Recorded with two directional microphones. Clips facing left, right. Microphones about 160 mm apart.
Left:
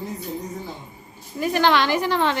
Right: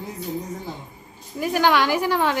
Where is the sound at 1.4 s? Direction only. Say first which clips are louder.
Even; 10° right (ahead or behind).